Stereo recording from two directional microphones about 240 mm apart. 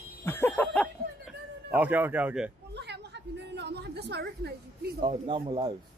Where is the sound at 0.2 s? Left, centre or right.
Centre.